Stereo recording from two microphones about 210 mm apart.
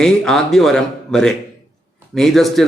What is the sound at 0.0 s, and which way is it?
Speech, centre (ahead or behind).